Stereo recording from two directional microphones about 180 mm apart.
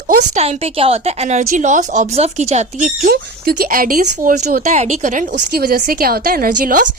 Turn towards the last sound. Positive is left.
turn(degrees=-50)  # may be behind; listen again after turning